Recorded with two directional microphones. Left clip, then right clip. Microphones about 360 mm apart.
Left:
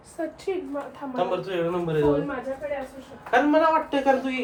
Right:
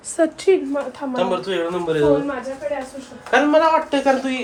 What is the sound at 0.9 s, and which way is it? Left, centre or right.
Speech, right.